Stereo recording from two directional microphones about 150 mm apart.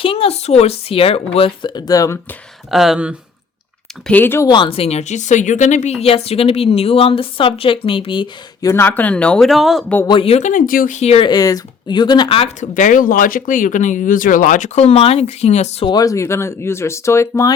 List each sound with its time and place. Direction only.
0.0 s speech: 40° left (ahead or behind)
2.6 s speech: 5° right (ahead or behind)
4.0 s speech: 10° left (ahead or behind)
4.4 s speech: 30° left (ahead or behind)
8.6 s speech: 15° left (ahead or behind); by 9.8 s centre (ahead or behind)
10.1 s speech: 40° left (ahead or behind)
11.3 s speech: 25° left (ahead or behind)
12.4 s speech: 55° left (ahead or behind)
15.9 s speech: 25° left (ahead or behind)